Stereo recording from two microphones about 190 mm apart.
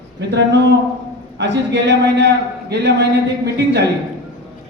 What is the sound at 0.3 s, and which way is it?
A man's voice, 65° right (ahead or behind).